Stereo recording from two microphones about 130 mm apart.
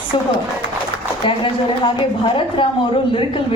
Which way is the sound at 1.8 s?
40° left (ahead or behind).